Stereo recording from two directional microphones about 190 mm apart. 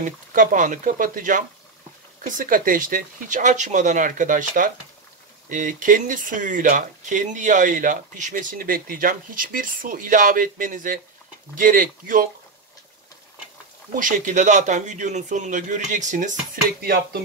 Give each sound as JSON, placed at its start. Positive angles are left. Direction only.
{"t": 0.0, "sound": "speech", "side_deg": -45}
{"t": 13.9, "sound": "a man's voice", "side_deg": -45}
{"t": 16.8, "sound": "speech", "side_deg": -55}